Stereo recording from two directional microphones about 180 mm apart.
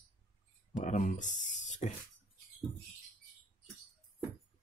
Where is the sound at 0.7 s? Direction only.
40° left (ahead or behind).